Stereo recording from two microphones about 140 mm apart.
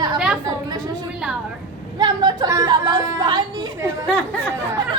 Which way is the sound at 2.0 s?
30° right (ahead or behind).